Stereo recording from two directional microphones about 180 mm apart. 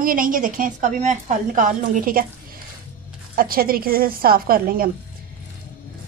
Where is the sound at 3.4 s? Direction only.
55° right (ahead or behind).